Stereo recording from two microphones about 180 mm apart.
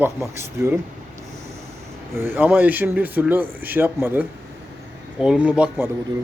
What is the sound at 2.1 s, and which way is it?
Speech, 10° right (ahead or behind).